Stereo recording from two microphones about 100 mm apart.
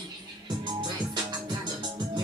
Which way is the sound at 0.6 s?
50° right (ahead or behind).